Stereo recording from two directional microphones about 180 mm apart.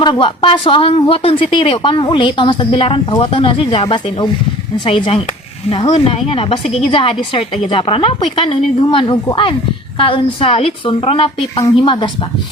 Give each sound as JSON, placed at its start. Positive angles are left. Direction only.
{"t": 0.0, "sound": "a woman's voice", "side_deg": 25}